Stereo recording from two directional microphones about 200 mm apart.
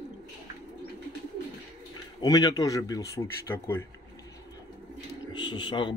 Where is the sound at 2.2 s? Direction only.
20° left (ahead or behind).